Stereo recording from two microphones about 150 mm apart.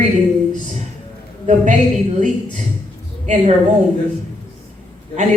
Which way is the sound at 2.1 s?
55° right (ahead or behind).